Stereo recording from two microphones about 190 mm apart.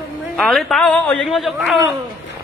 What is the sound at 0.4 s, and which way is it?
A woman's voice, centre (ahead or behind).